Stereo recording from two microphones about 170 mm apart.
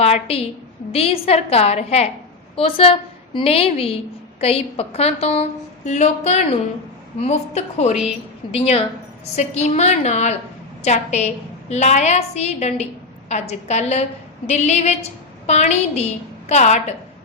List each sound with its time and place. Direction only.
0.0 s a woman's voice: 35° left (ahead or behind)